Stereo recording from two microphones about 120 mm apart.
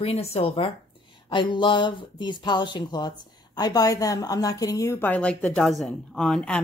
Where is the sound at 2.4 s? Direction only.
40° left (ahead or behind).